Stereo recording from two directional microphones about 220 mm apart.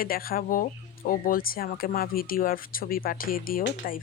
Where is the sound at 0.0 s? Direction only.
40° left (ahead or behind).